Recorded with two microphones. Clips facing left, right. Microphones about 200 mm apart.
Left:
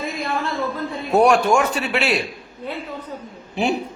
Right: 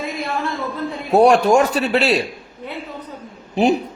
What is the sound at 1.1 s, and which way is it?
A man's voice, 35° right (ahead or behind).